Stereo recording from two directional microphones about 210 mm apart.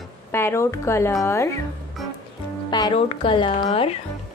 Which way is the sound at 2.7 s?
20° left (ahead or behind).